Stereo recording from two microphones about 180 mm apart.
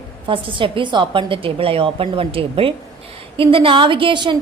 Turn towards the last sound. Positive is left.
turn(degrees=-25)  # may be behind; listen again after turning